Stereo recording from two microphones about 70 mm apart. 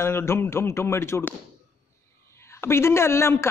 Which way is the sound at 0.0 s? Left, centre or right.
Left.